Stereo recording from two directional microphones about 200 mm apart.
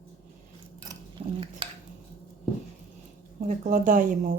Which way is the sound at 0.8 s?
25° right (ahead or behind).